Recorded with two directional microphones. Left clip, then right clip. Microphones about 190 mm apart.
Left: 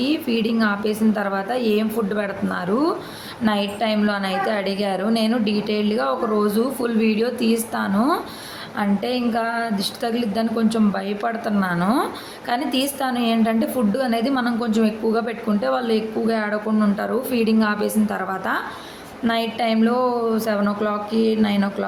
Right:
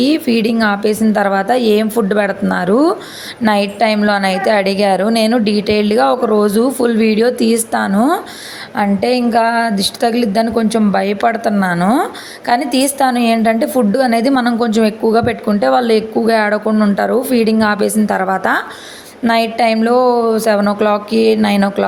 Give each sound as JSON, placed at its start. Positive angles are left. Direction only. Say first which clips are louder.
{"t": 0.0, "sound": "a woman's voice", "louder": "right 8 dB", "side_deg": -40}